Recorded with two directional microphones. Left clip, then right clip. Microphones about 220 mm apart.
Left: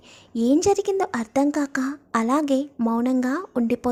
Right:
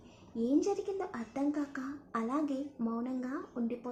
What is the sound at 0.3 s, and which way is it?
Speech, 50° left (ahead or behind).